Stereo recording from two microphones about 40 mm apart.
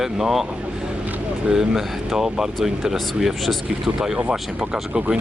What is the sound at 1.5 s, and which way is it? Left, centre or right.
Speech, centre.